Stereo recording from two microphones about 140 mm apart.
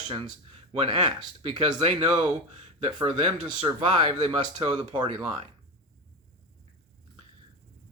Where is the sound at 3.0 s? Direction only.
40° right (ahead or behind).